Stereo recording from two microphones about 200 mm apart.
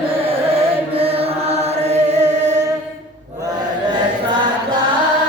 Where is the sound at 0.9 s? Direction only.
30° right (ahead or behind).